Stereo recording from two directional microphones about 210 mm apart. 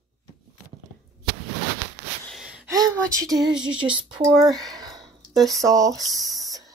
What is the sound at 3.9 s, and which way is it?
Speech, 20° right (ahead or behind).